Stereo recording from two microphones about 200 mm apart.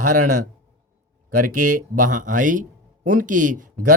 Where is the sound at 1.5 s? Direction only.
40° right (ahead or behind).